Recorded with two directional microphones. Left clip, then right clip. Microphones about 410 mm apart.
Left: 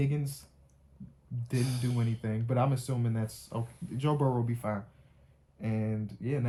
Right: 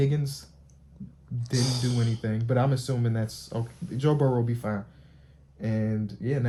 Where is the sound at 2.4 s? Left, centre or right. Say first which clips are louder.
Right 4 dB; centre.